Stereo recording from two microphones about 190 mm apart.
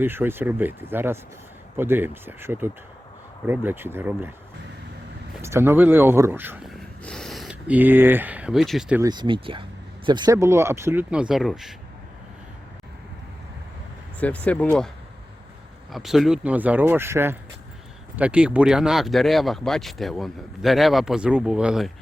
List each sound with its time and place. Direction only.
0.0 s speech: 10° right (ahead or behind)
5.4 s speech: 15° right (ahead or behind)
7.0 s speech: 5° left (ahead or behind)
9.0 s speech: 20° right (ahead or behind); by 11.7 s centre (ahead or behind)
14.2 s speech: 5° left (ahead or behind)
15.9 s speech: centre (ahead or behind)